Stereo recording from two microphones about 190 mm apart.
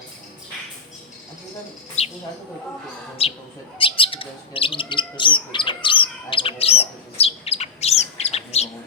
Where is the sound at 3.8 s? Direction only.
30° left (ahead or behind).